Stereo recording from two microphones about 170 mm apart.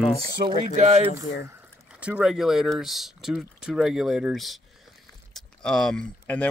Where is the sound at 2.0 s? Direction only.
5° right (ahead or behind).